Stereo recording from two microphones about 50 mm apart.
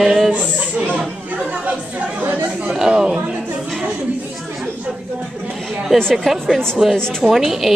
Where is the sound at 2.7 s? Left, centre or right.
Centre.